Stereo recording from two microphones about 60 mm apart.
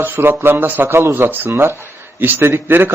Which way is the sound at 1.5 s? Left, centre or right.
Right.